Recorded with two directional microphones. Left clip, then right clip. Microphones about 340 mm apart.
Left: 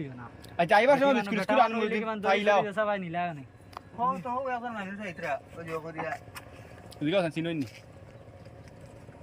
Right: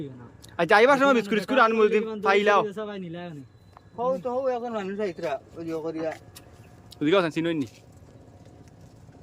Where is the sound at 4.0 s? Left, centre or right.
Centre.